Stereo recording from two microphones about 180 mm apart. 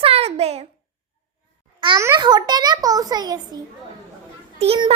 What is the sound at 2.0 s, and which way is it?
A child's voice, 20° right (ahead or behind).